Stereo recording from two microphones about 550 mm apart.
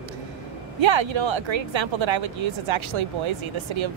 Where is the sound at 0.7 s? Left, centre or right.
Right.